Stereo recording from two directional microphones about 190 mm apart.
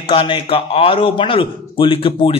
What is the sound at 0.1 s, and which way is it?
A man's voice, 25° left (ahead or behind).